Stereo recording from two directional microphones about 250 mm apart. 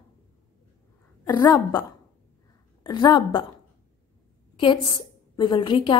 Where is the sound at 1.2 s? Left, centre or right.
Centre.